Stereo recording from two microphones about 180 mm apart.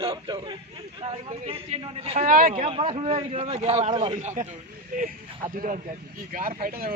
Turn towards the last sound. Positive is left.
turn(degrees=-50)  # may be behind; listen again after turning